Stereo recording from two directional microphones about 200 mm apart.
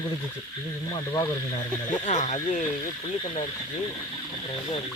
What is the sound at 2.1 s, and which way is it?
Speech, 35° left (ahead or behind).